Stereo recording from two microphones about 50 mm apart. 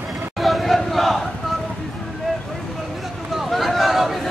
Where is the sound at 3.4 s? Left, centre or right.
Centre.